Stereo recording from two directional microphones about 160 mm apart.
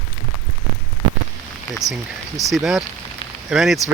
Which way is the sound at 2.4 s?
Centre (ahead or behind).